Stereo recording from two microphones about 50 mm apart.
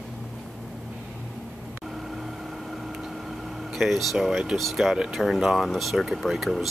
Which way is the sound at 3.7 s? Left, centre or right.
Centre.